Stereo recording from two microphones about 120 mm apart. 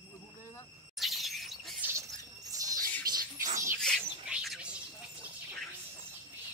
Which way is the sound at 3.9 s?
5° left (ahead or behind).